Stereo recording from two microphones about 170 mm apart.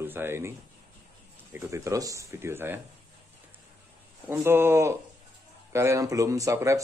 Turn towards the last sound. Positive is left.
turn(degrees=-20)  # may be behind; listen again after turning